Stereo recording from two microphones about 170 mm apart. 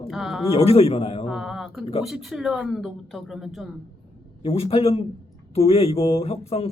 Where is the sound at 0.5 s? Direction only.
35° left (ahead or behind).